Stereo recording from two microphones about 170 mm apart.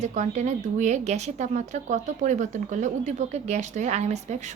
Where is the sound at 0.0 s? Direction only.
45° right (ahead or behind).